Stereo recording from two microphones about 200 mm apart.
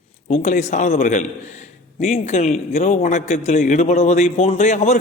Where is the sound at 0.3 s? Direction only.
35° left (ahead or behind).